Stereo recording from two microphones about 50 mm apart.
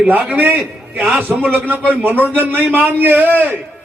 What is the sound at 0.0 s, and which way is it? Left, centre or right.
A man's voice, right.